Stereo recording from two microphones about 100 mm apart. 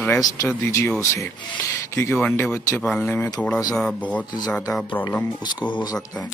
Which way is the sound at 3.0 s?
20° left (ahead or behind).